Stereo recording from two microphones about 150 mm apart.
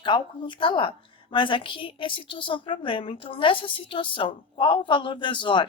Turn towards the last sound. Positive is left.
turn(degrees=30)  # may be behind; listen again after turning